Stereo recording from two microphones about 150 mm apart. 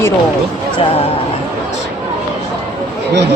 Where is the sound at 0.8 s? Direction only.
40° left (ahead or behind).